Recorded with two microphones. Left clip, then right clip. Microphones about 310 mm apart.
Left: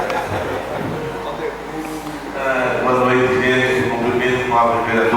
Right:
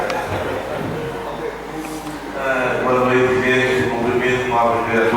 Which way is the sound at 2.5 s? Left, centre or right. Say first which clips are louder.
Left 1 dB; centre.